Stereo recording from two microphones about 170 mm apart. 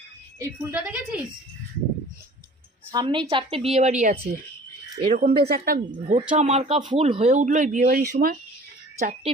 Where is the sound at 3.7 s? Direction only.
45° right (ahead or behind).